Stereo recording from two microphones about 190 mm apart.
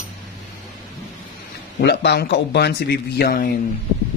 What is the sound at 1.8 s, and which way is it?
A man's voice, 60° left (ahead or behind).